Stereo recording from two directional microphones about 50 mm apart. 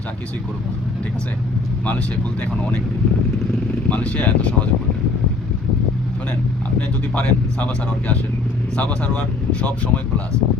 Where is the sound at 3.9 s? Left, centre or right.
Left.